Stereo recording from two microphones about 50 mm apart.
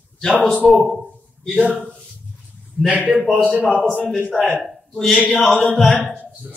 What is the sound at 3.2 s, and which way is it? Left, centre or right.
Speech, centre.